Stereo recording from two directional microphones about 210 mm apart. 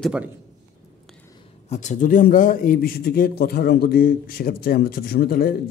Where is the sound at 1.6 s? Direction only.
35° left (ahead or behind).